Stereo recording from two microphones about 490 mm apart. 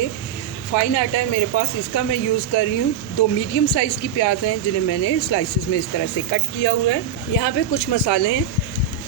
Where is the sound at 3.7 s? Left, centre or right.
Left.